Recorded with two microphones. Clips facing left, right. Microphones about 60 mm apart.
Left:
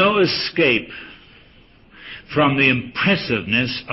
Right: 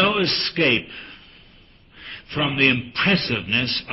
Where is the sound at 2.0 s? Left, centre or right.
Centre.